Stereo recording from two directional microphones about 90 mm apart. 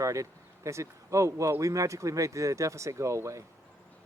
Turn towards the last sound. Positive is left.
turn(degrees=-35)  # may be behind; listen again after turning